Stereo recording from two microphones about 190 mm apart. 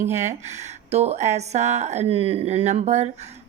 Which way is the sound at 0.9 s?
35° right (ahead or behind).